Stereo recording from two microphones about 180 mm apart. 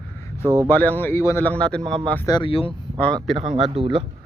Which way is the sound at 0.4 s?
15° right (ahead or behind).